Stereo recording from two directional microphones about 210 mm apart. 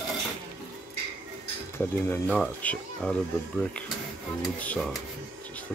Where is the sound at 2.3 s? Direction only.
5° left (ahead or behind).